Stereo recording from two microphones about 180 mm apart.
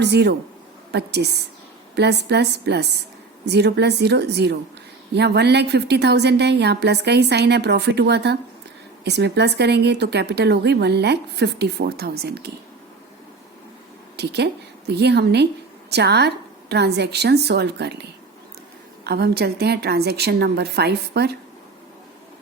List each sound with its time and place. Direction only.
0.0 s a woman's voice: 65° right (ahead or behind)
14.2 s speech: 70° right (ahead or behind)
19.0 s a woman's voice: 60° right (ahead or behind)